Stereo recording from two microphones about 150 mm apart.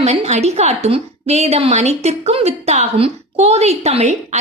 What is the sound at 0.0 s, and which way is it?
A woman's voice, 45° right (ahead or behind).